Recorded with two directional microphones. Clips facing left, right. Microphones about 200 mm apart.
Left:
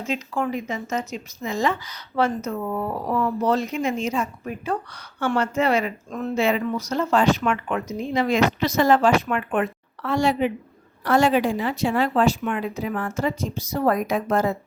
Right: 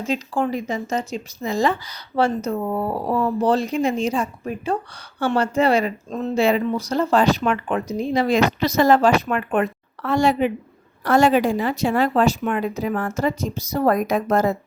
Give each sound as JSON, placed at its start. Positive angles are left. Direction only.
{"t": 0.1, "sound": "speech", "side_deg": -35}